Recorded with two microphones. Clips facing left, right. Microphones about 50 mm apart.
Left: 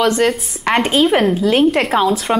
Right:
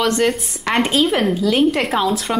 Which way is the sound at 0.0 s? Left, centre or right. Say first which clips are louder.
Left 3 dB; centre.